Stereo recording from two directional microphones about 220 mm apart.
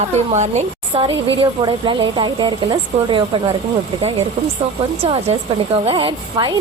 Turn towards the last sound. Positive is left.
turn(degrees=-20)  # may be behind; listen again after turning